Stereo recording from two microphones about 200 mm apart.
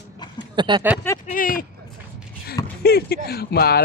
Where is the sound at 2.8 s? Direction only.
50° left (ahead or behind).